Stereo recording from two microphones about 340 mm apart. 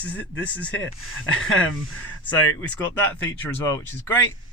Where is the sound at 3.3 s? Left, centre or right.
Centre.